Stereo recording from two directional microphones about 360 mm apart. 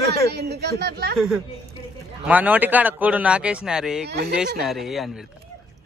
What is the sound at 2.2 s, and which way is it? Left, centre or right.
Speech, centre.